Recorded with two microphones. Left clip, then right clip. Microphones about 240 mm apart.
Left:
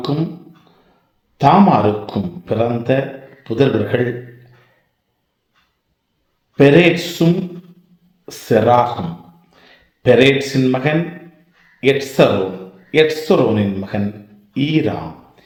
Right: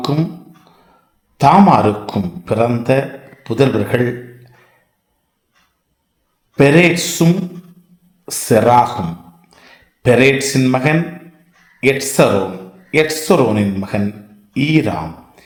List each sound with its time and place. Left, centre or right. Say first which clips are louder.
1.4 s a man's voice: right 2 dB; right
6.6 s a man's voice: even; right